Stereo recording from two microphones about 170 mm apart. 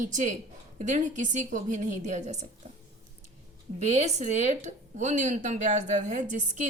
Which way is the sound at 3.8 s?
40° right (ahead or behind).